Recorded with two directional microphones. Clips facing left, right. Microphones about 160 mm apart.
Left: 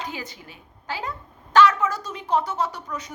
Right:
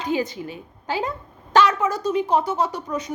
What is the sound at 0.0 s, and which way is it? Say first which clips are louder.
A woman's voice: right 10 dB; 20° right (ahead or behind).